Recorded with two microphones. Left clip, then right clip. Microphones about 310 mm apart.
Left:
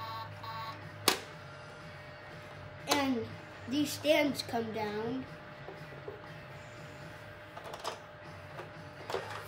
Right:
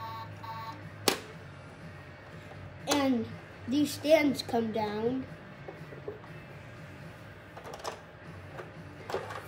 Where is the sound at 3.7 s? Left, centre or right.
Centre.